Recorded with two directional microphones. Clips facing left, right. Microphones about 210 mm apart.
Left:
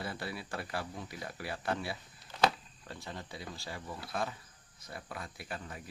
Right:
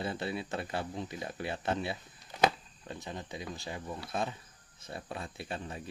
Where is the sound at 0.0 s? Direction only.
25° right (ahead or behind).